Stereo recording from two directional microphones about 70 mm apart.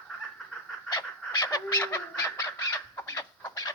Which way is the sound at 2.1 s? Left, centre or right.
Left.